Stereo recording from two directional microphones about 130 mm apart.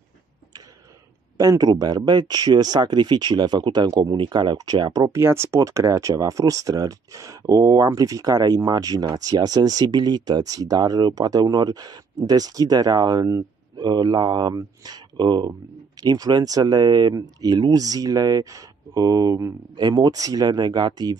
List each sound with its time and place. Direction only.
1.4 s speech: 30° right (ahead or behind)